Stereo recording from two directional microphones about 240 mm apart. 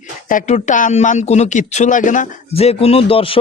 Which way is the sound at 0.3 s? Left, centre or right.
Left.